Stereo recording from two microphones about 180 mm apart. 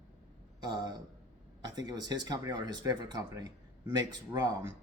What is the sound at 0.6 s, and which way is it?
A man's voice, 20° right (ahead or behind).